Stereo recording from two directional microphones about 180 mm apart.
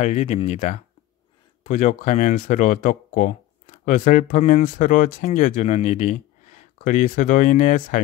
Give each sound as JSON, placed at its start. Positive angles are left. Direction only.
{"t": 0.0, "sound": "speech", "side_deg": 40}